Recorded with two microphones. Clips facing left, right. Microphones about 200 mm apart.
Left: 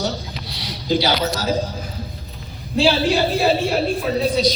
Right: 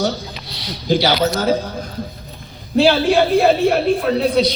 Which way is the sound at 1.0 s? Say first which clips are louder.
Right 4 dB; 60° right (ahead or behind).